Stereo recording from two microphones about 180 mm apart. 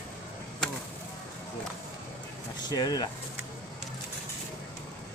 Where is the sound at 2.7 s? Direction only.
20° left (ahead or behind).